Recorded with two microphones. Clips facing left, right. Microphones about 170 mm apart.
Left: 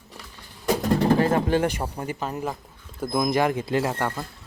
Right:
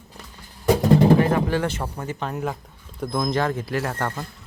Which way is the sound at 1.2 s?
25° left (ahead or behind).